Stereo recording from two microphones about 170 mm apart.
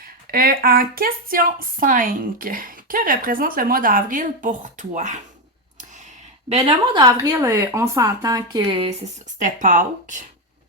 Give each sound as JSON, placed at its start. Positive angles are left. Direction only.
{"t": 0.0, "sound": "speech", "side_deg": -60}
{"t": 6.5, "sound": "speech", "side_deg": -30}
{"t": 9.4, "sound": "speech", "side_deg": -50}